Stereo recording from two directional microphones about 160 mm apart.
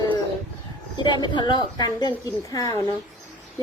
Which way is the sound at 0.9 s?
30° left (ahead or behind).